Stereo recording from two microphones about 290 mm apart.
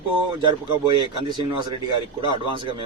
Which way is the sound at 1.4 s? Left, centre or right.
Centre.